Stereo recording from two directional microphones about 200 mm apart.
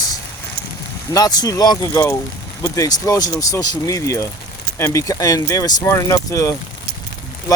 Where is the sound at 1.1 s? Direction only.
20° left (ahead or behind).